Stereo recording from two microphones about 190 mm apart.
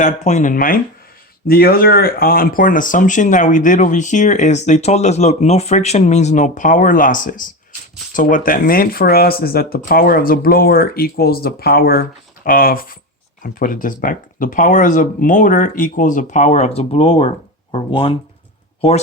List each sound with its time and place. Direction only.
0.0 s speech: 40° left (ahead or behind)